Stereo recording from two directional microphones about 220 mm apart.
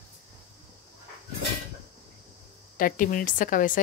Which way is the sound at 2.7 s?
40° left (ahead or behind).